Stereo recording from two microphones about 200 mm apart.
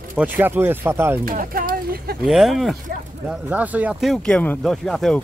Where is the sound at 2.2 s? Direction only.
Centre (ahead or behind).